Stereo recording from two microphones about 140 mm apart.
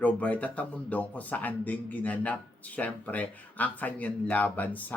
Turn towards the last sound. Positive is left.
turn(degrees=10)  # may be behind; listen again after turning